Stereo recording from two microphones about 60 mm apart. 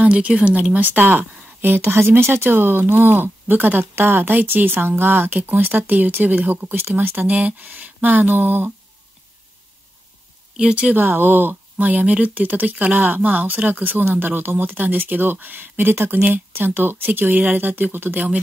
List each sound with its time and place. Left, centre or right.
0.0 s speech: centre
10.5 s speech: centre